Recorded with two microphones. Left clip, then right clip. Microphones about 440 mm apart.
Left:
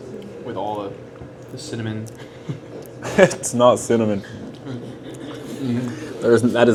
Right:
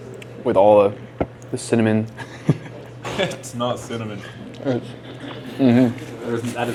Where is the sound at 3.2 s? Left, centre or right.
Left.